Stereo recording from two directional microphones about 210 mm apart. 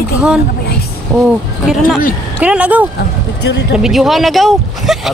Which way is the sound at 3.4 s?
55° left (ahead or behind).